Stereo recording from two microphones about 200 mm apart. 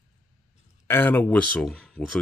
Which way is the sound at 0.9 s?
10° left (ahead or behind).